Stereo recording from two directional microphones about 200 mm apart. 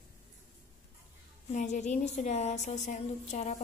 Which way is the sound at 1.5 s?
35° left (ahead or behind).